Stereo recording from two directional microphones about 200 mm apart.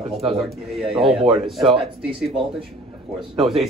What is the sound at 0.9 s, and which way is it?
Speech, centre (ahead or behind).